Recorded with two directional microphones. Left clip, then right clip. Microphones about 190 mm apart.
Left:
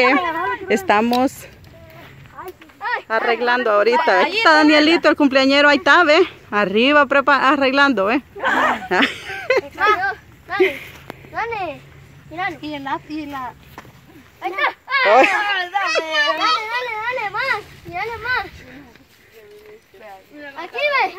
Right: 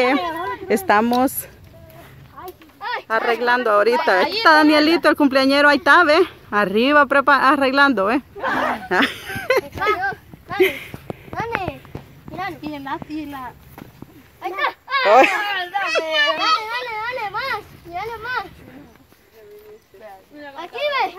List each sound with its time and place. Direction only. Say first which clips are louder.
0.0 s speech: left 3 dB; centre (ahead or behind)
2.4 s a sound: left 2 dB; 25° right (ahead or behind)
2.8 s speech: left 1 dB; centre (ahead or behind)
8.5 s speech: left 4 dB; 15° right (ahead or behind)
8.8 s a sound: left 1 dB; centre (ahead or behind)
11.3 s babbling: left 1 dB; centre (ahead or behind)
12.4 s speech: left 3 dB; centre (ahead or behind)
20.5 s speech: left 3 dB; centre (ahead or behind)